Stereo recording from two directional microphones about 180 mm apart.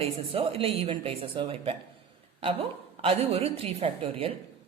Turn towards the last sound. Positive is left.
turn(degrees=-30)  # may be behind; listen again after turning